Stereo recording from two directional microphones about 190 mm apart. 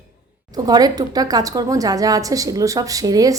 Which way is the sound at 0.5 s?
20° right (ahead or behind).